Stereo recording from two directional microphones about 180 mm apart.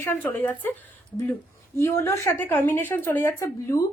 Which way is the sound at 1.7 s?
15° left (ahead or behind).